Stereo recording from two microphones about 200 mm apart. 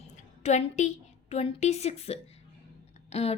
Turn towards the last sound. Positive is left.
turn(degrees=30)  # may be behind; listen again after turning